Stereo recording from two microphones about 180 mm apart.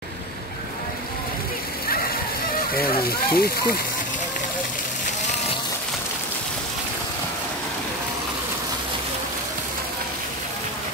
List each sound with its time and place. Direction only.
3.3 s speech: 55° left (ahead or behind)